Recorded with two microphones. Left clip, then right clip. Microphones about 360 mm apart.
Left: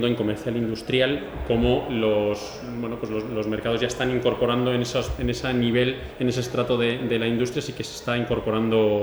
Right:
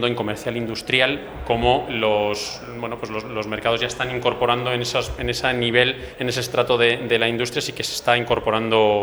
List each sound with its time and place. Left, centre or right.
0.0 s a man's voice: right
3.2 s a man's voice: right